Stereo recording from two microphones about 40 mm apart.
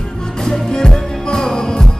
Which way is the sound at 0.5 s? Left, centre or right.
Centre.